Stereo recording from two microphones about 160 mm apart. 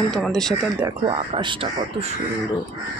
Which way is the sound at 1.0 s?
35° right (ahead or behind).